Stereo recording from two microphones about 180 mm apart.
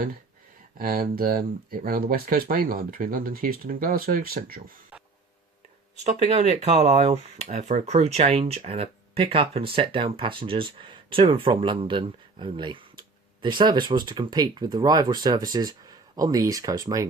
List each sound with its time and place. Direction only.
0.8 s speech: 55° right (ahead or behind)
6.0 s speech: 40° right (ahead or behind); by 17.1 s 20° right (ahead or behind)